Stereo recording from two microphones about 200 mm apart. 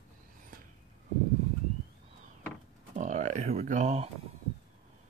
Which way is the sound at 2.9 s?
35° right (ahead or behind).